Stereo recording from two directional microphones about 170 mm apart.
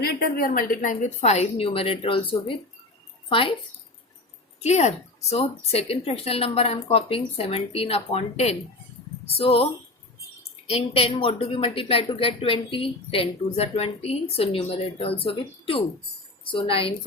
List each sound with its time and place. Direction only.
0.0 s a woman's voice: 60° left (ahead or behind); by 3.5 s 35° left (ahead or behind)
4.6 s a woman's voice: 40° left (ahead or behind)
10.7 s a woman's voice: 35° left (ahead or behind)